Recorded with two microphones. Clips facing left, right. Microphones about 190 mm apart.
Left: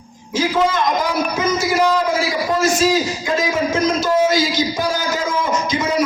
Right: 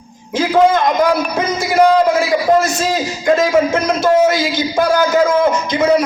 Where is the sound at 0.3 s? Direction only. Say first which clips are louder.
Right 5 dB; 55° right (ahead or behind).